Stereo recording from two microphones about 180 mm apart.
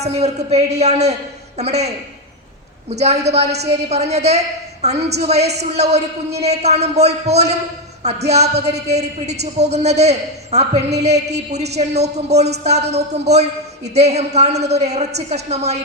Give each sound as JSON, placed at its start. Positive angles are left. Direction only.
{"t": 0.0, "sound": "a man's voice", "side_deg": -35}
{"t": 2.9, "sound": "a man's voice", "side_deg": -35}